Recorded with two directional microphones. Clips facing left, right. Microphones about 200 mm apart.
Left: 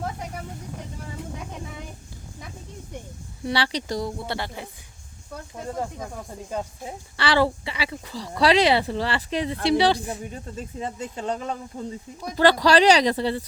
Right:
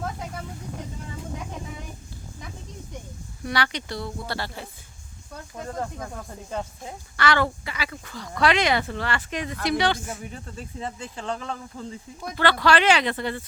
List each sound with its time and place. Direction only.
3.4 s speech: 30° left (ahead or behind)
4.3 s speech: 20° left (ahead or behind)
7.2 s speech: 30° left (ahead or behind)
11.3 s speech: 20° left (ahead or behind)
12.4 s speech: 40° left (ahead or behind)